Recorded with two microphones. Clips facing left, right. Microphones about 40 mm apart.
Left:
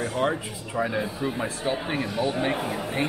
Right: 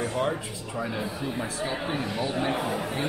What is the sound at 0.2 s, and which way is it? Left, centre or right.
A man's voice, left.